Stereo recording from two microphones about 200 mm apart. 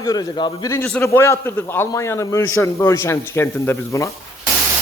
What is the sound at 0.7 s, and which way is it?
A man's voice, 10° left (ahead or behind).